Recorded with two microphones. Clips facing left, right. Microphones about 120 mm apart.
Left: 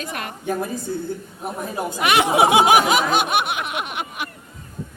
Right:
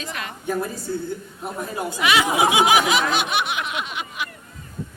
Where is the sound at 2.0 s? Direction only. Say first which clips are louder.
Left 3 dB; 55° left (ahead or behind).